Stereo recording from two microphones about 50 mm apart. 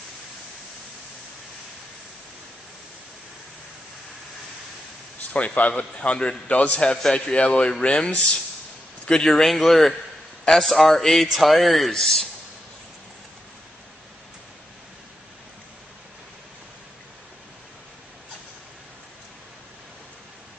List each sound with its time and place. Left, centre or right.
5.3 s a man's voice: left; by 12.3 s centre